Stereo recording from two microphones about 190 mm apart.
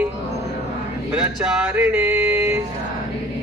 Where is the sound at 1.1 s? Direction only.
5° right (ahead or behind).